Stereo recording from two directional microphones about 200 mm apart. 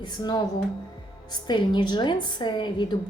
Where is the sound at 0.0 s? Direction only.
20° left (ahead or behind).